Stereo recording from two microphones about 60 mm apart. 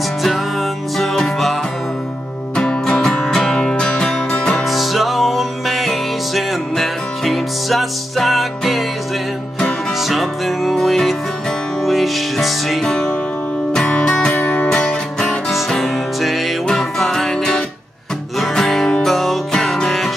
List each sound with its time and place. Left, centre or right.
0.9 s music: centre
2.5 s music: centre
4.6 s music: centre
9.9 s music: centre
14.4 s music: left
14.7 s music: centre